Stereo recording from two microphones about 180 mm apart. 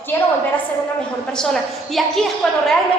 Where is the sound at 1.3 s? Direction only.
Centre (ahead or behind).